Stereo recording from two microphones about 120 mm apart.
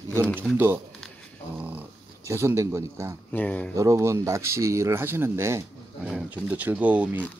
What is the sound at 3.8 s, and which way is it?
Speech, 25° right (ahead or behind).